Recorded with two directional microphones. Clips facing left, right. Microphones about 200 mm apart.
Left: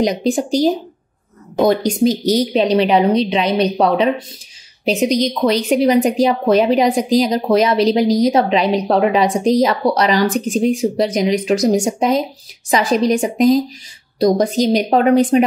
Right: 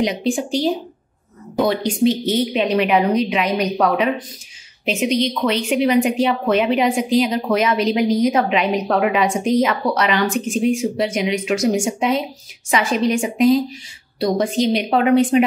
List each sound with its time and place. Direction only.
0.0 s a woman's voice: 40° left (ahead or behind)